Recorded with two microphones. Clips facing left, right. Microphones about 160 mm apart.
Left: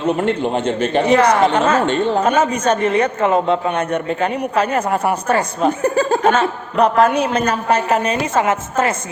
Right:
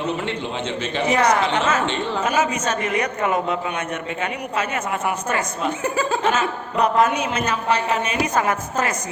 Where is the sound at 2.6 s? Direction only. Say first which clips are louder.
Left 7 dB; 30° left (ahead or behind).